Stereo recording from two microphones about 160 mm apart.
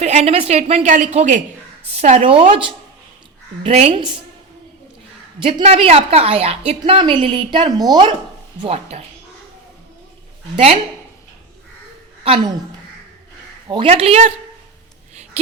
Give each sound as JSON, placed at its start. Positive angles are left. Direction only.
{"t": 0.0, "sound": "a woman's voice", "side_deg": -45}
{"t": 5.4, "sound": "a woman's voice", "side_deg": -35}
{"t": 8.6, "sound": "a woman's voice", "side_deg": -40}
{"t": 12.2, "sound": "a woman's voice", "side_deg": -35}
{"t": 13.7, "sound": "a woman's voice", "side_deg": -35}